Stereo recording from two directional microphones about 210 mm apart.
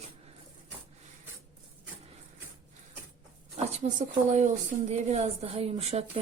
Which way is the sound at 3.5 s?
30° right (ahead or behind).